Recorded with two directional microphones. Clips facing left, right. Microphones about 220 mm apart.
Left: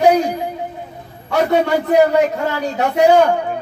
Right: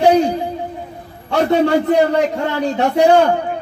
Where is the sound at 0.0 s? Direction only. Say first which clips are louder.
Right 1 dB; 30° right (ahead or behind).